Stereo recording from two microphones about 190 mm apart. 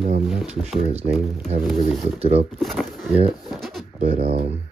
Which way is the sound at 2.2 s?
30° right (ahead or behind).